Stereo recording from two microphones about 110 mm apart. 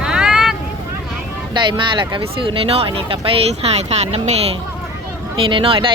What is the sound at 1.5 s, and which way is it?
Speech, 45° right (ahead or behind).